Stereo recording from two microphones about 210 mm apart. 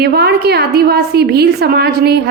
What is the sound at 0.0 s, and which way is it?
A woman's voice, 50° right (ahead or behind).